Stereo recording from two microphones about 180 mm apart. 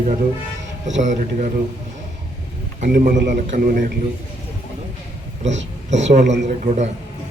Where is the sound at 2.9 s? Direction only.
60° right (ahead or behind).